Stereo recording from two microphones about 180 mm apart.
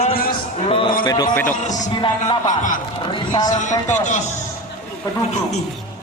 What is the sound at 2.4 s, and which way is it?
Speech, 45° left (ahead or behind).